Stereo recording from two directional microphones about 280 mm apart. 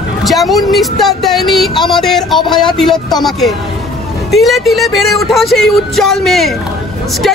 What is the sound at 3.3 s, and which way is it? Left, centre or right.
Speech, centre.